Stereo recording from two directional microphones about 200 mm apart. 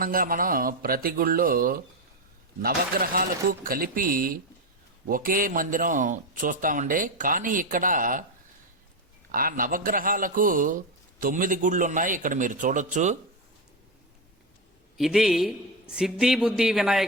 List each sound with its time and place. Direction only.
0.0 s a man's voice: 45° right (ahead or behind)
9.3 s a man's voice: 45° right (ahead or behind)
14.9 s speech: centre (ahead or behind)